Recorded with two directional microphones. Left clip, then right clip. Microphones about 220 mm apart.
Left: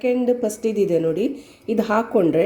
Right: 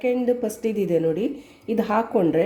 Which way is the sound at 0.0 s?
Centre (ahead or behind).